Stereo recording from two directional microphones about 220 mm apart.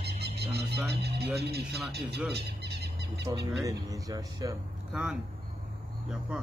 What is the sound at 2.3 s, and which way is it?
Bird, 50° right (ahead or behind).